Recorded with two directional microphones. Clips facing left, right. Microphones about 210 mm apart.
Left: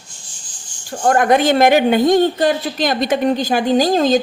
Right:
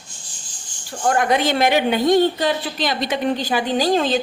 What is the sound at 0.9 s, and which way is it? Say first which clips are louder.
A woman's voice: left 5 dB; 45° left (ahead or behind).